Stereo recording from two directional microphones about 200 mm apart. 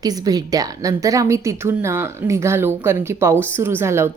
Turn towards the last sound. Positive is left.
turn(degrees=-15)  # may be behind; listen again after turning